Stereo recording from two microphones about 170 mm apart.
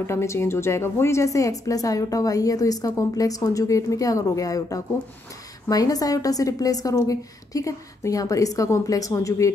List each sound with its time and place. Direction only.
0.0 s a woman's voice: 15° left (ahead or behind)